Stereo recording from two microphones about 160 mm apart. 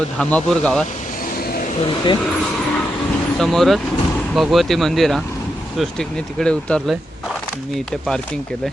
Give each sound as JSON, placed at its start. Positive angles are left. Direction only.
{"t": 0.2, "sound": "speech", "side_deg": 5}
{"t": 3.3, "sound": "speech", "side_deg": 0}